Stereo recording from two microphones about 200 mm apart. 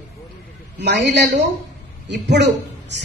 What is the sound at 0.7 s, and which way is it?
Speech, 60° right (ahead or behind).